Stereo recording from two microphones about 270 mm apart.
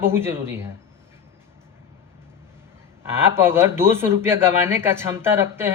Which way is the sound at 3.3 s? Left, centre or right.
Centre.